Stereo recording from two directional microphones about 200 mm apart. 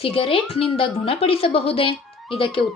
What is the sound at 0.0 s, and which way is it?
A woman's voice, 25° left (ahead or behind).